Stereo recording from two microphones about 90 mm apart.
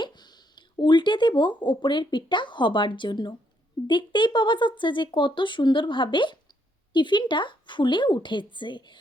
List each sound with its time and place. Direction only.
0.0 s speech: 55° left (ahead or behind)